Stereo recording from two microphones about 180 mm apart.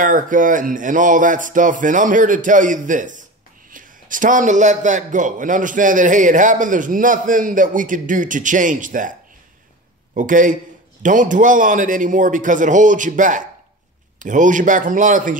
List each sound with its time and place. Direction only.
0.0 s a man's voice: 45° right (ahead or behind)
10.1 s a man's voice: 45° right (ahead or behind)